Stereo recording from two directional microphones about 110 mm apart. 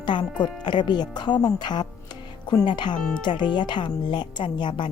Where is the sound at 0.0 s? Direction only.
45° left (ahead or behind).